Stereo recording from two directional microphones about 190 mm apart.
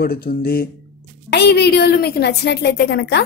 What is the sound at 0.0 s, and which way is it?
A woman's voice, 55° left (ahead or behind).